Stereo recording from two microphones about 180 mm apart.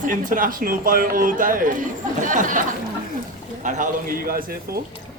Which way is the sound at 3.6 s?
45° right (ahead or behind).